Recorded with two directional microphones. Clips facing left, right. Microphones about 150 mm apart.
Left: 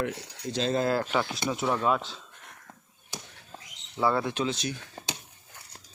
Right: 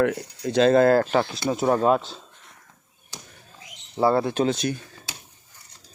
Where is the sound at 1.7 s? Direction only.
40° right (ahead or behind).